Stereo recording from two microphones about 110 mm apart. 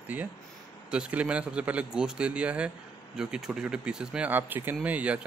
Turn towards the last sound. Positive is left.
turn(degrees=-10)  # may be behind; listen again after turning